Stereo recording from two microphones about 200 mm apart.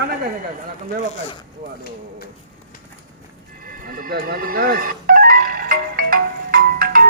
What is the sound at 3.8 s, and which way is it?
Music, 45° right (ahead or behind).